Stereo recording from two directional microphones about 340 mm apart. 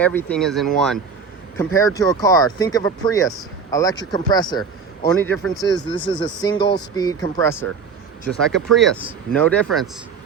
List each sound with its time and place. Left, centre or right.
0.0 s speech: centre